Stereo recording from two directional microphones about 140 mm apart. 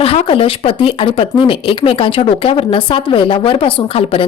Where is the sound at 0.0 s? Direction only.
45° left (ahead or behind).